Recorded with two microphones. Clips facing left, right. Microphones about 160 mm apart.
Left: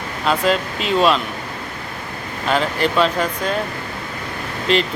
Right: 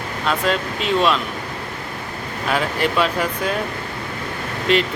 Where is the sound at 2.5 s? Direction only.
5° right (ahead or behind).